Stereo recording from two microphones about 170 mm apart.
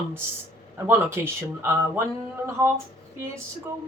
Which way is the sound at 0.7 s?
15° right (ahead or behind).